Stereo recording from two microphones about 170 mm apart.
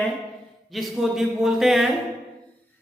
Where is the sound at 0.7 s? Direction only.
Centre (ahead or behind).